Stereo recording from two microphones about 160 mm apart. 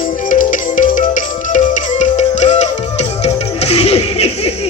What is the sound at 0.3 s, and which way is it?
Music, 55° left (ahead or behind).